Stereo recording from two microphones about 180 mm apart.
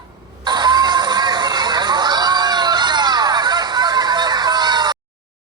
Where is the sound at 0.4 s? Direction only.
25° right (ahead or behind).